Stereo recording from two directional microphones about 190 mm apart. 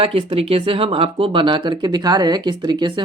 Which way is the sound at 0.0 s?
30° right (ahead or behind).